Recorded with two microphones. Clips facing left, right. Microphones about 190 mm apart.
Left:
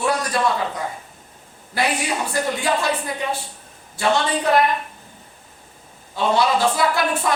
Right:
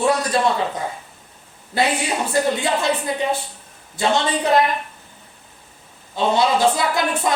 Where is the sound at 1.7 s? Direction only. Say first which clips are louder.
Right 2 dB; 25° right (ahead or behind).